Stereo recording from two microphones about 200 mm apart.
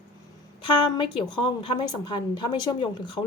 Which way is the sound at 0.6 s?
25° left (ahead or behind).